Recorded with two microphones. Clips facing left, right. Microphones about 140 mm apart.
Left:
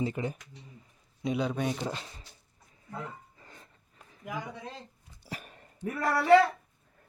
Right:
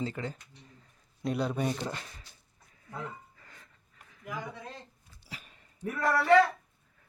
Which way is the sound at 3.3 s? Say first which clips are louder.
Left 3 dB; 25° left (ahead or behind).